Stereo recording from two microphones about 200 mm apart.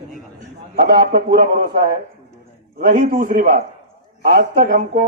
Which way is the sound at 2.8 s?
40° right (ahead or behind).